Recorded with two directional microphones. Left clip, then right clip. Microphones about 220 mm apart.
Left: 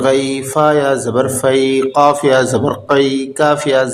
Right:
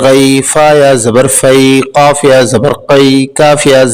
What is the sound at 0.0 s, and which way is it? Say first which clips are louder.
A man's voice: right 8 dB; 45° right (ahead or behind).